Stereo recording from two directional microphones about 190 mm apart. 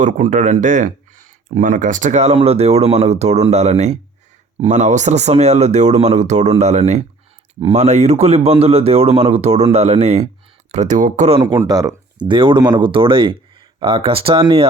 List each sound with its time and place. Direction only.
0.0 s speech: 40° right (ahead or behind)
11.3 s speech: 20° right (ahead or behind)